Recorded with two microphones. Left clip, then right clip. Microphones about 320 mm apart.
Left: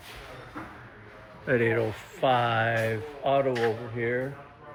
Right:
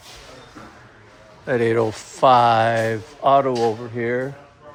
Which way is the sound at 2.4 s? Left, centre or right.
Right.